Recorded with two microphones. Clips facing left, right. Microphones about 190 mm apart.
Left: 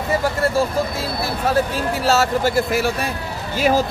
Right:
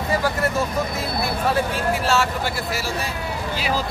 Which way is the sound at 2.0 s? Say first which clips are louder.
Left 4 dB; 40° left (ahead or behind).